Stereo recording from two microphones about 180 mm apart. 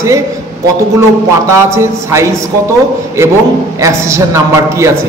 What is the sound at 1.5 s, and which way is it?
Speech, 15° right (ahead or behind).